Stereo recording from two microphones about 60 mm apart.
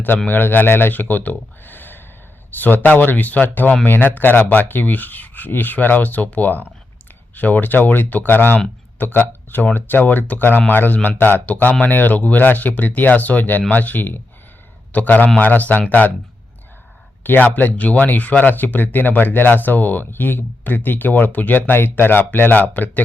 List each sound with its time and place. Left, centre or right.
0.3 s speech: left
17.2 s speech: left